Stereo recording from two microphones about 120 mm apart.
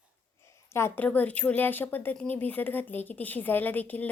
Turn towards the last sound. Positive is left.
turn(degrees=15)  # may be behind; listen again after turning